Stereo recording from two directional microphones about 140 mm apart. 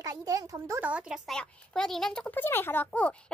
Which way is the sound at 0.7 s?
10° right (ahead or behind).